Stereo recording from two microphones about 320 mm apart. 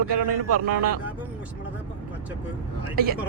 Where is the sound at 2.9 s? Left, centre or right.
Right.